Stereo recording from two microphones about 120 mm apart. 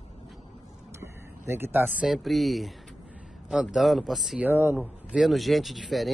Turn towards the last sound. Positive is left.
turn(degrees=0)  # may be behind; listen again after turning